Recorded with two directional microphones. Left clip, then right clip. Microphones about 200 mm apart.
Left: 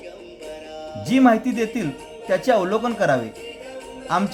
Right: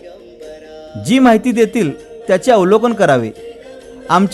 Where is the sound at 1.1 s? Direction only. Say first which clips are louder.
Right 6 dB; 40° right (ahead or behind).